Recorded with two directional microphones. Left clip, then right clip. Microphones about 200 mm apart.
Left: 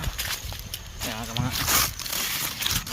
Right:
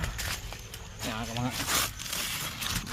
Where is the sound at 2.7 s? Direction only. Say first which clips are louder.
Left 7 dB; 20° left (ahead or behind).